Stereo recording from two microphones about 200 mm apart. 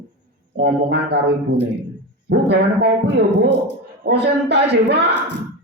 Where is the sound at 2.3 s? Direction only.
55° right (ahead or behind).